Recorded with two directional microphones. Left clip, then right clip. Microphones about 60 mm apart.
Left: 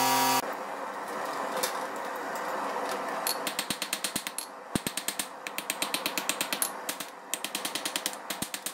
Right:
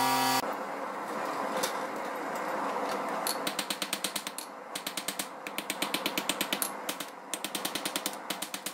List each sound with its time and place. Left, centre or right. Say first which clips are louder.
0.0 s vehicle: left 2 dB; left
1.1 s vehicle: even; left
5.6 s a sound: even; centre